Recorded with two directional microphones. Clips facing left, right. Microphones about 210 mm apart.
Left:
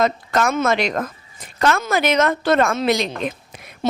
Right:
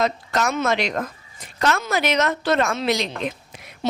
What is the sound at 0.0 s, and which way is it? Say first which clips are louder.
A woman's voice: left 3 dB; 50° left (ahead or behind).